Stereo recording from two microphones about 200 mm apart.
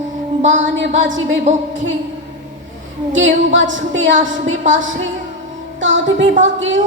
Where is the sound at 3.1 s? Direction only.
70° right (ahead or behind).